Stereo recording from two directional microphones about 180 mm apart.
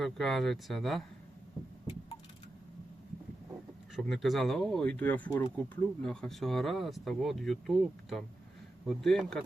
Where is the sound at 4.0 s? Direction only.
Centre (ahead or behind).